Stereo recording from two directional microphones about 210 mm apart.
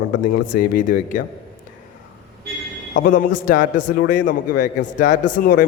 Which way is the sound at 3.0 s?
40° left (ahead or behind).